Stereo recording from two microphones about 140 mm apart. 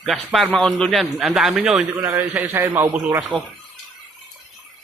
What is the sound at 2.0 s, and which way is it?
A man's voice, 15° right (ahead or behind).